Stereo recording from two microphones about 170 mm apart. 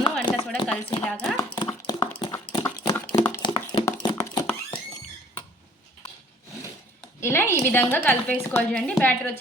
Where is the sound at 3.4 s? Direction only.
25° left (ahead or behind).